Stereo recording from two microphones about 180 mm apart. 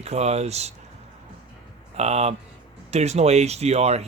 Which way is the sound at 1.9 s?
35° right (ahead or behind).